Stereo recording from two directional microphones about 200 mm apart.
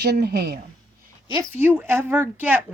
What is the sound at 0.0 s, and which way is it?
Speech, 55° right (ahead or behind).